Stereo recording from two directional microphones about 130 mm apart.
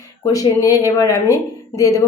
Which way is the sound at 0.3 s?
25° left (ahead or behind).